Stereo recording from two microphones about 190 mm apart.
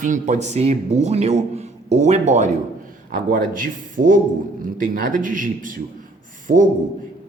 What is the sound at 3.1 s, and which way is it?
A man's voice, 50° right (ahead or behind).